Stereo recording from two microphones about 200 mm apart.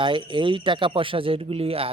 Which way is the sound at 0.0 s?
25° right (ahead or behind).